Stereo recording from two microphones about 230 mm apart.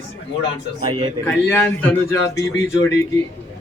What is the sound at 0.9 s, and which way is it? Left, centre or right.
Speech, right.